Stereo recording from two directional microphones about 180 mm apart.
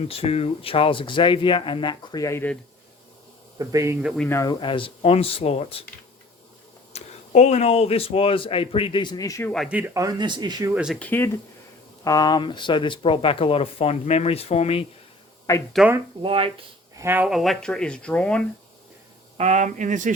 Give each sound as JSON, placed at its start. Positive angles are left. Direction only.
{"t": 0.1, "sound": "speech", "side_deg": 35}
{"t": 3.6, "sound": "speech", "side_deg": -15}
{"t": 4.3, "sound": "speech", "side_deg": 15}
{"t": 4.6, "sound": "speech", "side_deg": 30}
{"t": 6.9, "sound": "speech", "side_deg": 40}
{"t": 9.5, "sound": "speech", "side_deg": 0}
{"t": 11.0, "sound": "speech", "side_deg": 10}
{"t": 15.7, "sound": "speech", "side_deg": -5}
{"t": 16.2, "sound": "speech", "side_deg": -30}
{"t": 17.0, "sound": "speech", "side_deg": -10}
{"t": 17.2, "sound": "speech", "side_deg": 0}
{"t": 19.4, "sound": "speech", "side_deg": -40}